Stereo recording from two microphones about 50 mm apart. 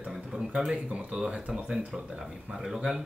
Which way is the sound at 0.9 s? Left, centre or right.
Centre.